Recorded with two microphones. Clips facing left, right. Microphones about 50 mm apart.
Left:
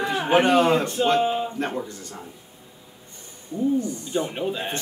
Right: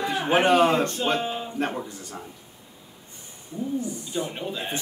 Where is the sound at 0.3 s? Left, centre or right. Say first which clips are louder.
Left 1 dB; centre.